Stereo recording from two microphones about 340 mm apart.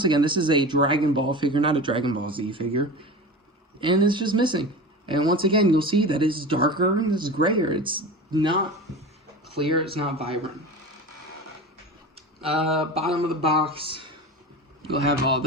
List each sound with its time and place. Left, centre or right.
0.0 s speech: centre
9.6 s speech: centre
12.4 s speech: centre